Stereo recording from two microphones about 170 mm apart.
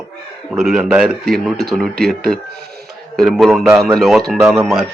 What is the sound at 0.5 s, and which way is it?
Speech, centre (ahead or behind).